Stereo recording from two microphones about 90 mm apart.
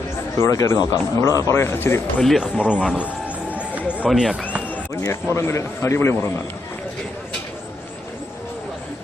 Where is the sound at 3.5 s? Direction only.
15° right (ahead or behind).